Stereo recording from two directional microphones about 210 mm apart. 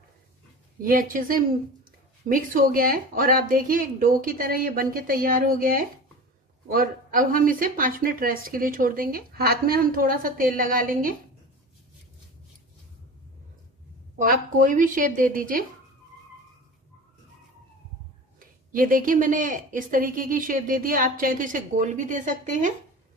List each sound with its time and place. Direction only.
0.7 s a woman's voice: 40° right (ahead or behind)
14.1 s a woman's voice: 40° right (ahead or behind)
18.4 s a woman's voice: 40° right (ahead or behind)